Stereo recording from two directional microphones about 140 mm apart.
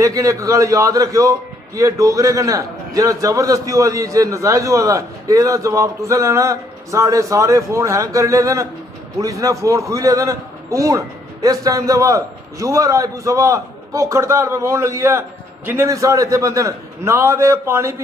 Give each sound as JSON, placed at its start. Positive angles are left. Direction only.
{"t": 0.0, "sound": "a man's voice", "side_deg": -25}